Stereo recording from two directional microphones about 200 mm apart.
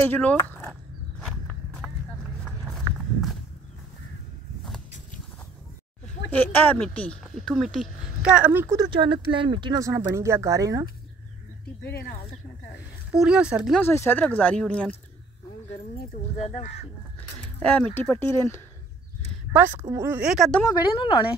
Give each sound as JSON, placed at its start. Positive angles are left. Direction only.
{"t": 0.0, "sound": "speech", "side_deg": 10}
{"t": 0.5, "sound": "a sound", "side_deg": 10}
{"t": 1.2, "sound": "walk", "side_deg": 5}
{"t": 6.3, "sound": "speech", "side_deg": 10}
{"t": 8.7, "sound": "speech", "side_deg": -20}
{"t": 11.8, "sound": "speech", "side_deg": 50}
{"t": 13.1, "sound": "speech", "side_deg": -5}
{"t": 13.7, "sound": "speech", "side_deg": 10}
{"t": 16.3, "sound": "speech", "side_deg": 35}
{"t": 17.6, "sound": "speech", "side_deg": 5}
{"t": 19.5, "sound": "speech", "side_deg": -10}
{"t": 20.6, "sound": "a woman's voice", "side_deg": 20}